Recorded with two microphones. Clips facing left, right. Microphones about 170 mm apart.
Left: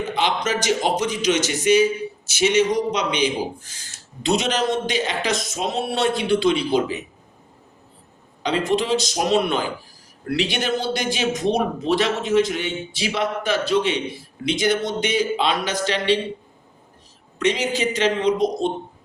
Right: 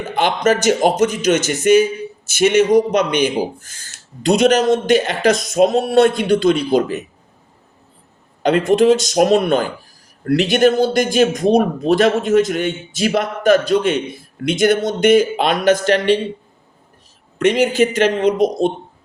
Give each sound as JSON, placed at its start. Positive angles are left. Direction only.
{"t": 0.1, "sound": "speech", "side_deg": -50}
{"t": 8.4, "sound": "speech", "side_deg": -50}
{"t": 17.3, "sound": "speech", "side_deg": -50}